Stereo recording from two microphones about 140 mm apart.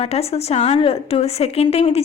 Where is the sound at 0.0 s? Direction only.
45° left (ahead or behind).